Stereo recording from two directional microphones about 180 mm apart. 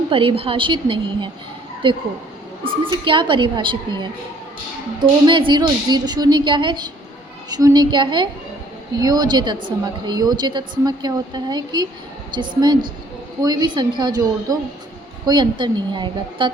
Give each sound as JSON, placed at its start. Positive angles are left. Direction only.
{"t": 0.1, "sound": "a woman's voice", "side_deg": -30}
{"t": 3.0, "sound": "a woman's voice", "side_deg": -30}